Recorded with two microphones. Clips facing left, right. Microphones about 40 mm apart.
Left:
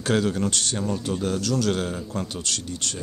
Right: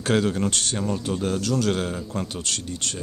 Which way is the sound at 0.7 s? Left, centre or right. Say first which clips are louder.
Right 1 dB; centre.